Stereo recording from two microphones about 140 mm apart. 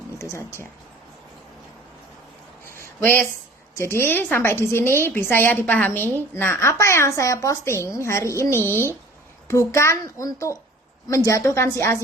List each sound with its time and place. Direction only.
0.2 s speech: 20° left (ahead or behind)
3.0 s a woman's voice: 15° left (ahead or behind)